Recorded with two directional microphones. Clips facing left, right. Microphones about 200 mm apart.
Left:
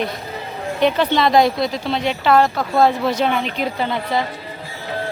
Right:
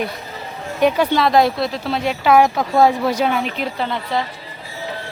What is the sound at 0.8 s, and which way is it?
Speech, 10° right (ahead or behind).